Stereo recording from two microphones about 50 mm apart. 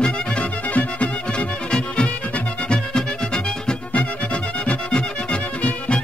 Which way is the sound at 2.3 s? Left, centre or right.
Centre.